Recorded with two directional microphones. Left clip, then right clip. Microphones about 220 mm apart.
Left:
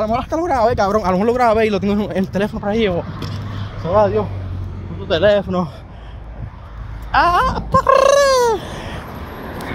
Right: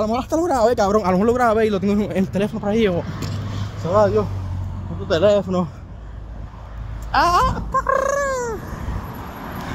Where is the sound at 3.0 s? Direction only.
Centre (ahead or behind).